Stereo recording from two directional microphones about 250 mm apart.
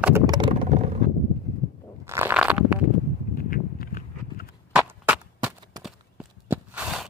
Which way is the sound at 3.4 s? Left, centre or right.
Left.